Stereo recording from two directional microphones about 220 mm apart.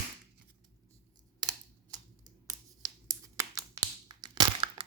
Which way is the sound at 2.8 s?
15° right (ahead or behind).